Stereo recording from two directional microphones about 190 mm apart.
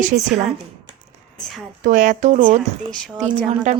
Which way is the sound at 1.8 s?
40° right (ahead or behind).